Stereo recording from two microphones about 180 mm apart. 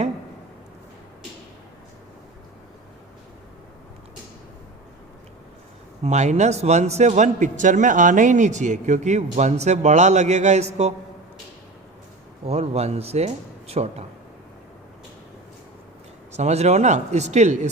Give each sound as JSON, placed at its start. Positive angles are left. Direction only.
{"t": 6.0, "sound": "a man's voice", "side_deg": -40}
{"t": 12.5, "sound": "a man's voice", "side_deg": -35}
{"t": 16.3, "sound": "a man's voice", "side_deg": -40}